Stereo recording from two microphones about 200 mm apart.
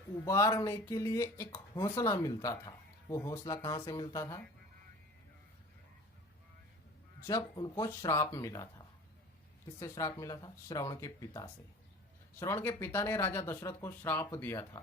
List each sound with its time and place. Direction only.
0.3 s speech: 15° left (ahead or behind)
7.3 s speech: 20° left (ahead or behind)